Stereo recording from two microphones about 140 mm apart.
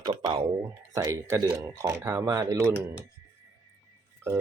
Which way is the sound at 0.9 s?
25° right (ahead or behind).